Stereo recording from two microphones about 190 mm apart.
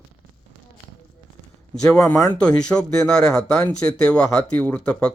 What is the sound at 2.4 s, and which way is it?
Speech, 5° left (ahead or behind).